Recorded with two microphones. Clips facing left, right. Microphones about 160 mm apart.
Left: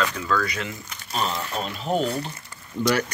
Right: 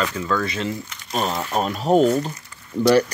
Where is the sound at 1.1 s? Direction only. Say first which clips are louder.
Right 5 dB; 45° right (ahead or behind).